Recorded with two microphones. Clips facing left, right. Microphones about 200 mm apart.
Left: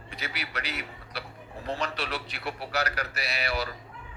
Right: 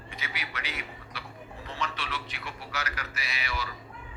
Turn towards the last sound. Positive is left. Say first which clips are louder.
# left 5 dB
turn(degrees=35)  # may be behind; listen again after turning